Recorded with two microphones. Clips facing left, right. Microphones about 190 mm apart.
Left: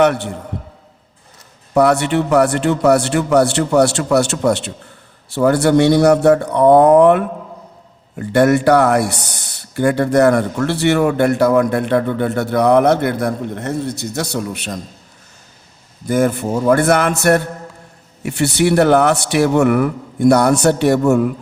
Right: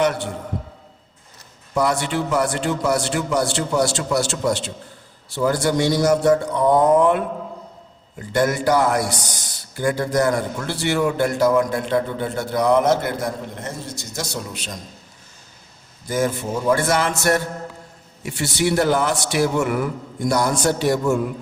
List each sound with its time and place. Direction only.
0.0 s a man's voice: 65° left (ahead or behind)
1.7 s speech: 65° left (ahead or behind)
16.0 s speech: 60° left (ahead or behind)